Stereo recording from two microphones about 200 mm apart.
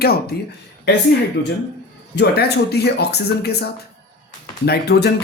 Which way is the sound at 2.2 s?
55° left (ahead or behind).